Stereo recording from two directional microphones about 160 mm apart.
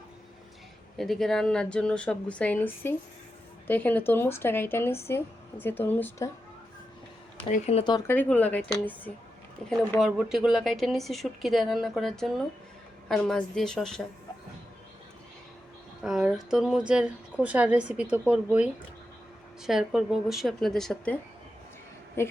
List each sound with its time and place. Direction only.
0.9 s a woman's voice: centre (ahead or behind)
7.5 s speech: 40° left (ahead or behind)
8.0 s a woman's voice: 10° left (ahead or behind)
16.0 s speech: 5° right (ahead or behind)
22.2 s speech: 15° left (ahead or behind)